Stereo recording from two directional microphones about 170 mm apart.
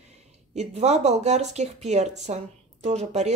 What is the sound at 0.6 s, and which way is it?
Speech, 40° right (ahead or behind).